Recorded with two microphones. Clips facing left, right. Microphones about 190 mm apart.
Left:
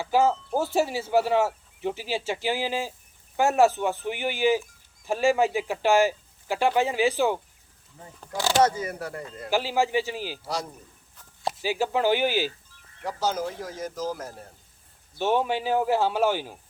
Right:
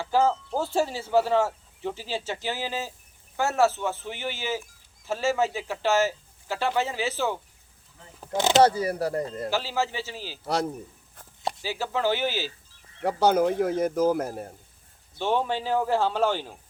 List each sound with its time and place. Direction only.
0.0 s speech: 10° left (ahead or behind)
8.3 s speech: 20° right (ahead or behind)
8.6 s speech: 35° right (ahead or behind)
9.5 s speech: 15° left (ahead or behind)
10.4 s speech: 60° right (ahead or behind)
11.6 s speech: 15° left (ahead or behind)
13.0 s speech: 60° right (ahead or behind)
15.2 s speech: 10° left (ahead or behind)